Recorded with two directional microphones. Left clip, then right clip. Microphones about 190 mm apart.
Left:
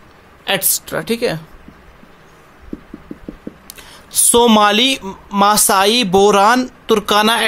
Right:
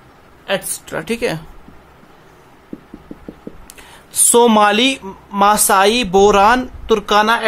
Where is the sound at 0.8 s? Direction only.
Centre (ahead or behind).